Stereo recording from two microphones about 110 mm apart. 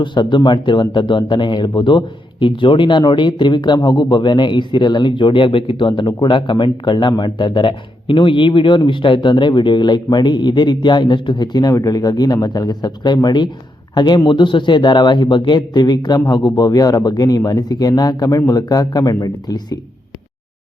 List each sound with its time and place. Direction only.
0.0 s speech: 45° left (ahead or behind)